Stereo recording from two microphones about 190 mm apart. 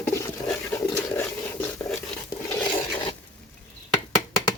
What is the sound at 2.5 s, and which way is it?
Filing, 10° left (ahead or behind).